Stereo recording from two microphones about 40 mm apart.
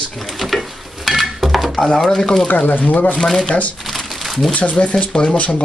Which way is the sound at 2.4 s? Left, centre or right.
Left.